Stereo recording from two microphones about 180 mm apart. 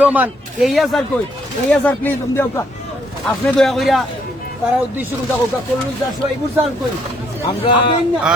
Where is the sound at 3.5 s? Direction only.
Centre (ahead or behind).